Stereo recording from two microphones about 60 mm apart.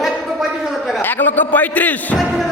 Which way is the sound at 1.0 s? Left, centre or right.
Left.